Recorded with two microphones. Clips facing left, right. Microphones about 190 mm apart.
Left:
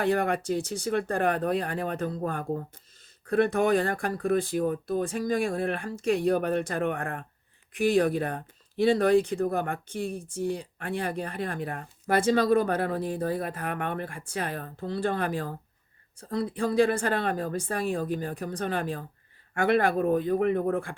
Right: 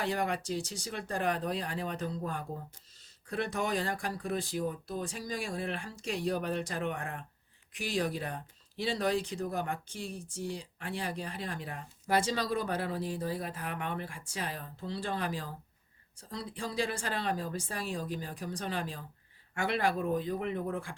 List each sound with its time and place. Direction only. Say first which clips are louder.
0.0 s speech: left 7 dB; 55° left (ahead or behind)